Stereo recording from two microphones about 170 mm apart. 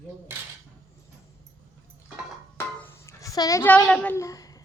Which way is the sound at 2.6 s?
10° left (ahead or behind).